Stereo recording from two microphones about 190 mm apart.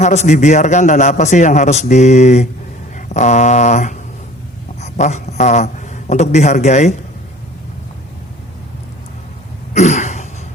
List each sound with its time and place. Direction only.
0.0 s a man's voice: 35° left (ahead or behind)
2.9 s a sound: 40° left (ahead or behind)
4.8 s a man's voice: 35° left (ahead or behind)
9.7 s cough: 40° left (ahead or behind)